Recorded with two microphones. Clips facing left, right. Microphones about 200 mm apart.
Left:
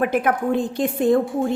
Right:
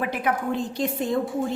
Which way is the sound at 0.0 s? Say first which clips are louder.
Left 6 dB; 50° left (ahead or behind).